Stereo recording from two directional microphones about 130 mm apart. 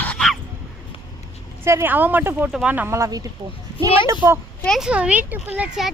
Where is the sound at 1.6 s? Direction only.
20° right (ahead or behind).